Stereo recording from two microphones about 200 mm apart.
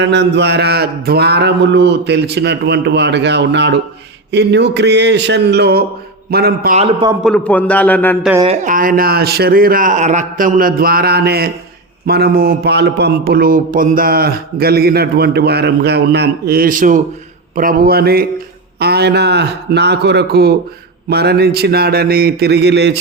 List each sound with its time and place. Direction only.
0.0 s mantra: 60° right (ahead or behind)
6.3 s a man's voice: 50° right (ahead or behind)
6.7 s a man's voice: 30° right (ahead or behind)
7.3 s a man's voice: 5° left (ahead or behind)
8.4 s a man's voice: 35° right (ahead or behind)
18.8 s mantra: 55° right (ahead or behind)
21.1 s a man's voice: 55° right (ahead or behind)